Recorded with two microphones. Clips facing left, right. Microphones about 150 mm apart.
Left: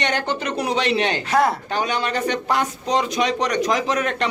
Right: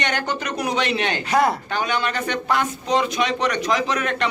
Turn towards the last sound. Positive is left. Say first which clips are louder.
# left 1 dB
turn(degrees=40)  # may be behind; listen again after turning